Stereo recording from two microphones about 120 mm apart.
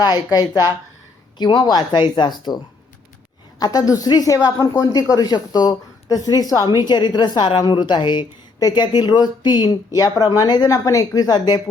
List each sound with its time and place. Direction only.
0.0 s a woman's voice: 35° left (ahead or behind)
3.6 s a woman's voice: 30° left (ahead or behind)